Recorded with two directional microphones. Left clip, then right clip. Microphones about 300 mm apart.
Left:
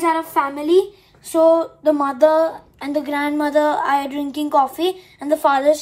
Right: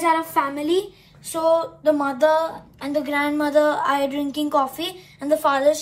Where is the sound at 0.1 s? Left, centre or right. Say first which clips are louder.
Left 1 dB; left.